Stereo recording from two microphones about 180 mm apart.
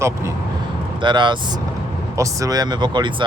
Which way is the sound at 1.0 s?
25° right (ahead or behind).